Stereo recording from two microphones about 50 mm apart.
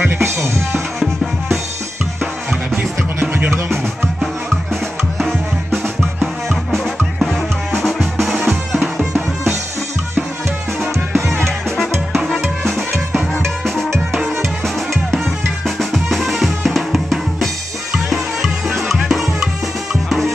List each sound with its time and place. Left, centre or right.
0.0 s drum kit: right
0.9 s music: centre
3.2 s music: right
5.2 s music: centre
7.8 s music: centre
10.8 s music: centre
15.1 s drum: centre
17.9 s music: centre